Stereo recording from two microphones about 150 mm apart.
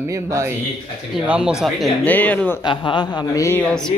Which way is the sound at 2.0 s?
10° left (ahead or behind).